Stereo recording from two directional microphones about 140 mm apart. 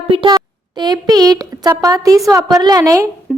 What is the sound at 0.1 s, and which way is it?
A woman's voice, 35° right (ahead or behind).